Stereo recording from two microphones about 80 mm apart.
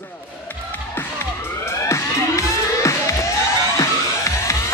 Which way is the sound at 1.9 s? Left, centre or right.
Left.